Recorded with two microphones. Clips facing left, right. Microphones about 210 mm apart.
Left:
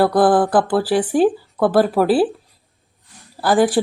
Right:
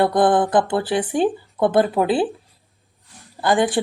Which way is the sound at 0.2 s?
5° left (ahead or behind).